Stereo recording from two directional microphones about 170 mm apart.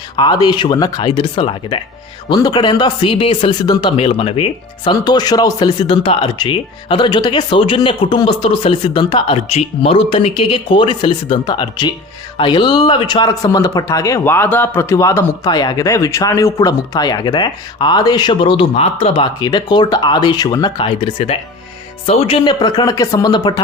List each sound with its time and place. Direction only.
0.2 s speech: 25° left (ahead or behind)